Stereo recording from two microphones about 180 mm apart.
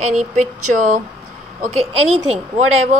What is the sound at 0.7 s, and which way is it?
Speech, 50° right (ahead or behind).